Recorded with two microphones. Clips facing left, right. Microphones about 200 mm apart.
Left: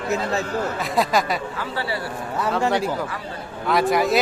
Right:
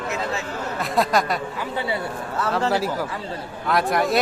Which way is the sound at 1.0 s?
Centre (ahead or behind).